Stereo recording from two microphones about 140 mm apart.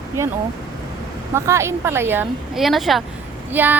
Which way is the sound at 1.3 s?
20° right (ahead or behind).